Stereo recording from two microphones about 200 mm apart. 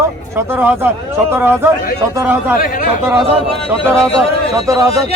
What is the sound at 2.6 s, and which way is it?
Speech, 45° left (ahead or behind).